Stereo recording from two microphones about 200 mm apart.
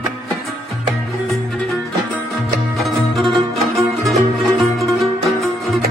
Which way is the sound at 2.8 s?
Centre (ahead or behind).